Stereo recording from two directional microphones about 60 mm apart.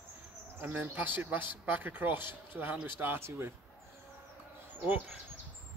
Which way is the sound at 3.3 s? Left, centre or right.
Right.